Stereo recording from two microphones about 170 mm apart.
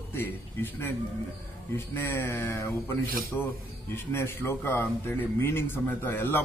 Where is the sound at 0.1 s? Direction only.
15° left (ahead or behind).